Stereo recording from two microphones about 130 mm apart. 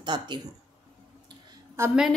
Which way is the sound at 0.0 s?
35° right (ahead or behind).